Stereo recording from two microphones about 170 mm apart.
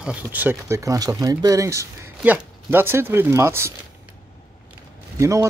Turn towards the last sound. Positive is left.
turn(degrees=-20)  # may be behind; listen again after turning